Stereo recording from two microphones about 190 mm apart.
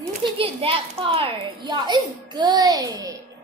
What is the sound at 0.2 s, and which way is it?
A child's voice, 30° right (ahead or behind).